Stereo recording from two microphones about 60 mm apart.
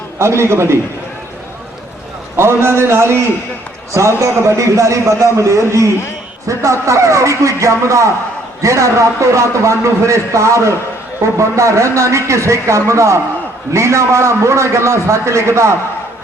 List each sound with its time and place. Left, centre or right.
0.2 s a man's voice: right
2.3 s a man's voice: right